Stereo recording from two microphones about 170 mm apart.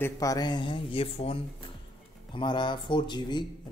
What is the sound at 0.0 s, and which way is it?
Speech, 20° left (ahead or behind).